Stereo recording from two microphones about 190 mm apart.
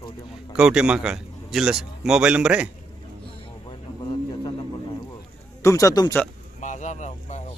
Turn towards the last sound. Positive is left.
turn(degrees=40)  # may be behind; listen again after turning